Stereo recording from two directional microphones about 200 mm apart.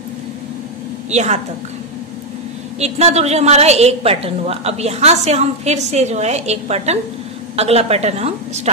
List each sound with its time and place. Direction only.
1.1 s a woman's voice: 35° right (ahead or behind)
2.8 s a woman's voice: 30° right (ahead or behind)